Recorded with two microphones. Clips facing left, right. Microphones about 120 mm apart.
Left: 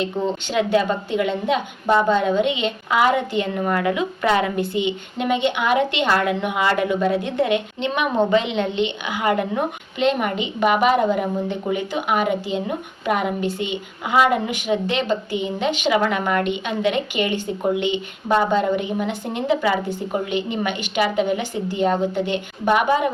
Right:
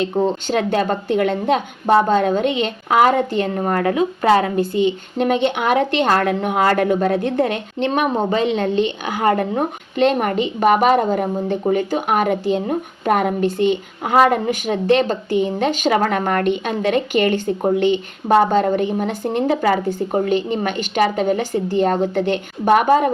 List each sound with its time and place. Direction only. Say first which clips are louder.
0.0 s a woman's voice: right 4 dB; 45° right (ahead or behind)